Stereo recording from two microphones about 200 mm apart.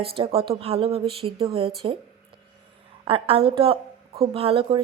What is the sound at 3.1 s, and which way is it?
A woman's voice, 30° right (ahead or behind).